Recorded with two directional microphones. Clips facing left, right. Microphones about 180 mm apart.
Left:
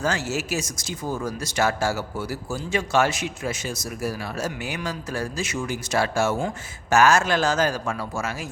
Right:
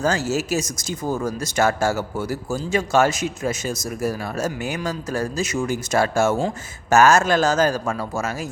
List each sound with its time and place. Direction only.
0.0 s speech: 40° right (ahead or behind)